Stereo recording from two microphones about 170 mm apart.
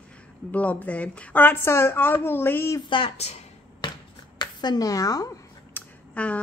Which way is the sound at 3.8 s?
25° left (ahead or behind).